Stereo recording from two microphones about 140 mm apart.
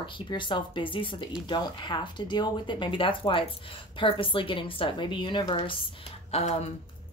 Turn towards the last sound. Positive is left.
turn(degrees=50)  # may be behind; listen again after turning